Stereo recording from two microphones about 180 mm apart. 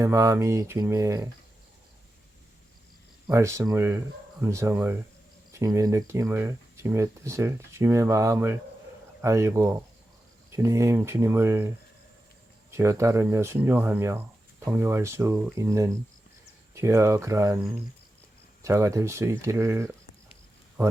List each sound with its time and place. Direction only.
0.0 s speech: 15° right (ahead or behind)
3.3 s speech: 15° right (ahead or behind)
12.7 s speech: 15° right (ahead or behind)
18.6 s speech: 15° right (ahead or behind)